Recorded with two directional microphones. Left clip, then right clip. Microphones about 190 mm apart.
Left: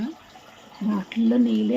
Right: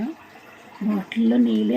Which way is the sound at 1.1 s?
5° right (ahead or behind).